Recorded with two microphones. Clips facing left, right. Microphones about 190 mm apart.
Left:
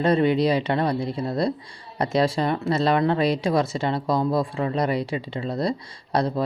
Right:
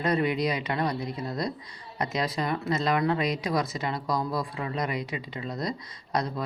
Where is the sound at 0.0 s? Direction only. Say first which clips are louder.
Left 6 dB; 30° left (ahead or behind).